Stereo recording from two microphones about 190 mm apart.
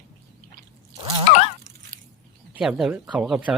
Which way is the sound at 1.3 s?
30° left (ahead or behind).